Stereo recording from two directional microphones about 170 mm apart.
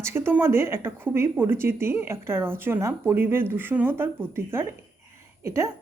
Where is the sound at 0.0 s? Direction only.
15° right (ahead or behind).